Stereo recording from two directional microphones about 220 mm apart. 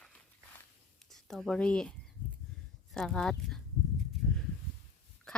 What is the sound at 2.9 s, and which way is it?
Speech, centre (ahead or behind).